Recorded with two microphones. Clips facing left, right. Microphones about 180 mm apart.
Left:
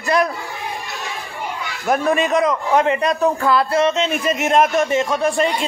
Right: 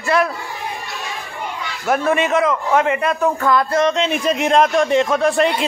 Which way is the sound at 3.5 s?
30° left (ahead or behind).